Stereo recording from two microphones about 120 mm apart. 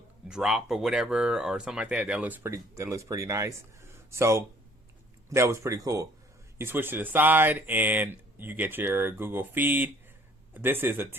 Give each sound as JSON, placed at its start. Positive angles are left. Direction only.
{"t": 0.3, "sound": "speech", "side_deg": -5}